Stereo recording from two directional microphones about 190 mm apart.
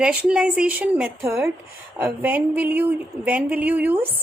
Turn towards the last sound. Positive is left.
turn(degrees=-10)  # may be behind; listen again after turning